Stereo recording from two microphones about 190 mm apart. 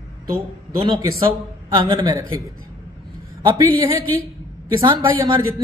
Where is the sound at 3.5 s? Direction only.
15° right (ahead or behind).